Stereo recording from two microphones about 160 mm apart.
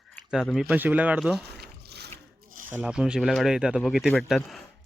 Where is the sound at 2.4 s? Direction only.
60° right (ahead or behind).